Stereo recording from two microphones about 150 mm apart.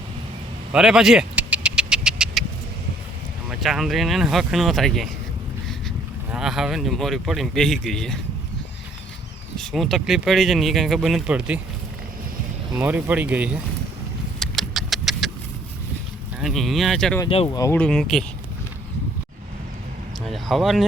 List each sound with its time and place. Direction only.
0.7 s vehicle: 5° right (ahead or behind)
3.5 s speech: centre (ahead or behind)
6.3 s speech: 5° right (ahead or behind)
9.6 s speech: centre (ahead or behind)
12.7 s speech: 10° right (ahead or behind)
14.3 s vehicle: centre (ahead or behind)
16.4 s speech: centre (ahead or behind)
17.2 s speech: 40° left (ahead or behind)
17.5 s speech: 20° left (ahead or behind)
17.7 s speech: 5° left (ahead or behind)
20.2 s speech: centre (ahead or behind)